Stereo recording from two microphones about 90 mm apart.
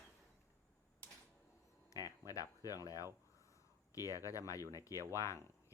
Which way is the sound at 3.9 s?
40° left (ahead or behind).